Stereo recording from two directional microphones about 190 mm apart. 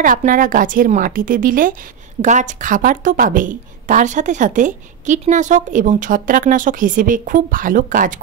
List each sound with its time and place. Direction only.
0.0 s a woman's voice: 45° right (ahead or behind)